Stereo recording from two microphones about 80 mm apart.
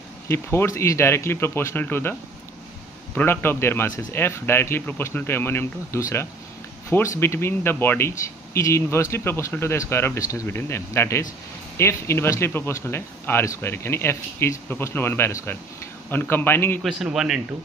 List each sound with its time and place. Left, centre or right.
0.3 s speech: left
3.2 s speech: left
8.1 s speech: left
16.8 s a man's voice: centre